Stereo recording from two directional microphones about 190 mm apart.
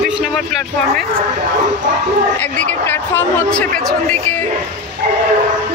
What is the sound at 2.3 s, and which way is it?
Speech, 10° left (ahead or behind).